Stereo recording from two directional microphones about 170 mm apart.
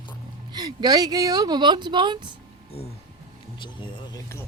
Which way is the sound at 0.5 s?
25° right (ahead or behind).